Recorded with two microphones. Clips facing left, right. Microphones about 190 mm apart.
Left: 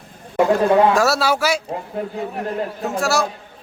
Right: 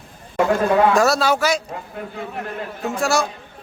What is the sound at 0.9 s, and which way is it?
Speech, 5° left (ahead or behind).